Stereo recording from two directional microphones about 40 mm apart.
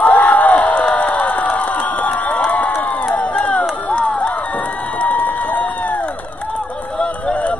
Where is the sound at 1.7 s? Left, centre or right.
Left.